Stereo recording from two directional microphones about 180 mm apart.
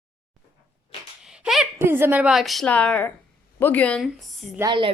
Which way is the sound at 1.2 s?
5° right (ahead or behind).